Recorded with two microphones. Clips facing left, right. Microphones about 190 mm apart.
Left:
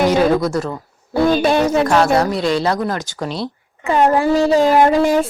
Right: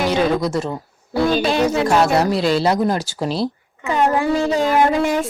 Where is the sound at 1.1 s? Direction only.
55° left (ahead or behind).